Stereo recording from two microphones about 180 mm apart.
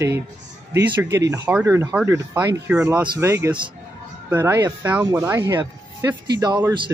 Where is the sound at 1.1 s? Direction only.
20° right (ahead or behind).